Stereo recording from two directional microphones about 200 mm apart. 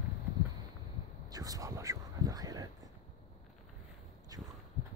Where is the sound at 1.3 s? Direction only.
20° right (ahead or behind).